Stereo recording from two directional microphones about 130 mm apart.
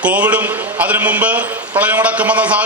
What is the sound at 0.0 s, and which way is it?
A man's voice, 10° right (ahead or behind).